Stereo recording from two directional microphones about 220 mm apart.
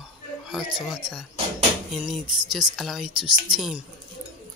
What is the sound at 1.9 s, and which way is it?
Speech, centre (ahead or behind).